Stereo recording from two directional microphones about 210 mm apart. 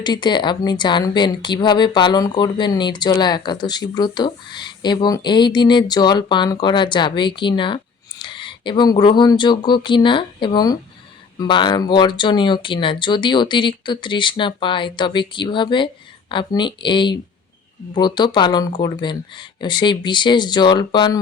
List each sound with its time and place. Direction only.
0.0 s a woman's voice: 20° left (ahead or behind)